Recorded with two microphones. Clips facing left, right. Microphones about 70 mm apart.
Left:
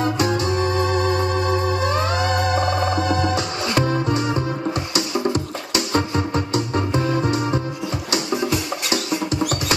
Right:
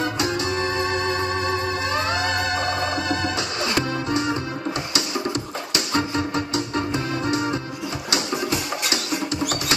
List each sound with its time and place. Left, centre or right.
0.4 s organ: right
3.2 s music: left
5.7 s music: left
6.5 s organ: left